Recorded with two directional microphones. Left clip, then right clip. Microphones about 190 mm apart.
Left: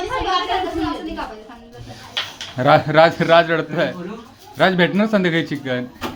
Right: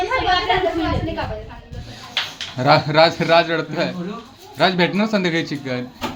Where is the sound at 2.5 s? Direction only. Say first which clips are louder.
Left 1 dB; 15° left (ahead or behind).